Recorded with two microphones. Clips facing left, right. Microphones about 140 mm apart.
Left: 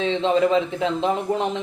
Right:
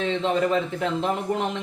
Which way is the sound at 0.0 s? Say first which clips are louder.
Left 4 dB; 20° left (ahead or behind).